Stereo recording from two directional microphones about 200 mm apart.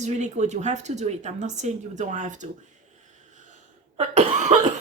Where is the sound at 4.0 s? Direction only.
35° right (ahead or behind).